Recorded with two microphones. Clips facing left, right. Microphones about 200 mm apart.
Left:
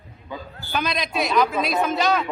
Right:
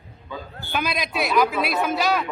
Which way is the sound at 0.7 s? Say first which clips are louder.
Left 1 dB; centre (ahead or behind).